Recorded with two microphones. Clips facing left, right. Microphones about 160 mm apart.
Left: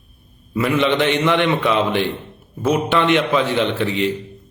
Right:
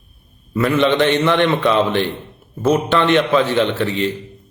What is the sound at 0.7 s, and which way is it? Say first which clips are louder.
Speech: right 2 dB; 15° left (ahead or behind).